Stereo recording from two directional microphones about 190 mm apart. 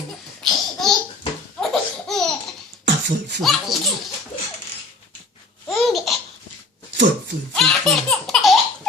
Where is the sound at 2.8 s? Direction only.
65° right (ahead or behind).